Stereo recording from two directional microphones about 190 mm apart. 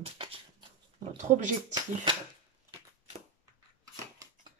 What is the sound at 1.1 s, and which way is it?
Speech, 40° right (ahead or behind).